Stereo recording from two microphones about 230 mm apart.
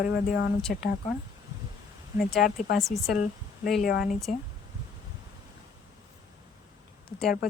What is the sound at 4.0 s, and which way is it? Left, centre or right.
Speech, centre.